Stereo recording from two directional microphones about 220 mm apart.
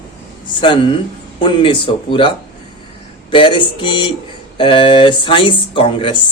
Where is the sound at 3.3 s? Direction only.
20° left (ahead or behind).